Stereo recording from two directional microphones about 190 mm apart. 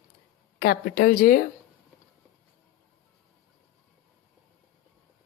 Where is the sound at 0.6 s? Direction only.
55° left (ahead or behind).